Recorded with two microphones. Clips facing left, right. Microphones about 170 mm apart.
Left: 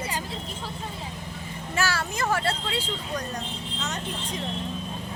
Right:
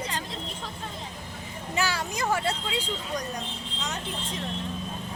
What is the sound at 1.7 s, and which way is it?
Speech, 15° right (ahead or behind).